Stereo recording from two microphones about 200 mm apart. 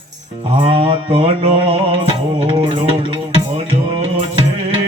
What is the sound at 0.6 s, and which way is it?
Music, 25° right (ahead or behind).